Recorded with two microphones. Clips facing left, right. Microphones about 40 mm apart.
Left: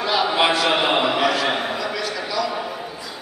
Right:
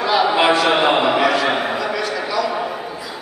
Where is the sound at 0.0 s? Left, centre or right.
Centre.